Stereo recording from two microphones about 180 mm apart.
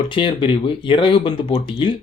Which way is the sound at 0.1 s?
30° left (ahead or behind).